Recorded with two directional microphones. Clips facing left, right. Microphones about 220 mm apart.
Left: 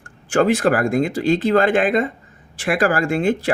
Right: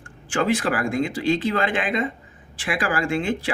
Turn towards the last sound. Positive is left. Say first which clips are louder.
# left 5 dB
turn(degrees=45)  # may be behind; listen again after turning